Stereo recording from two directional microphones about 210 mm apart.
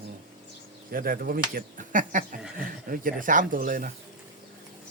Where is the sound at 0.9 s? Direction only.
45° right (ahead or behind).